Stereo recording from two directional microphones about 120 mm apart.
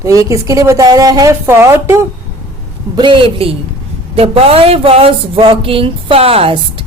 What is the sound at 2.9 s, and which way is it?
A woman's voice, 40° right (ahead or behind).